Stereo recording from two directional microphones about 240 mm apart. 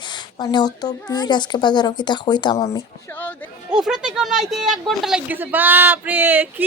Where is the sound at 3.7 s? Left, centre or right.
Centre.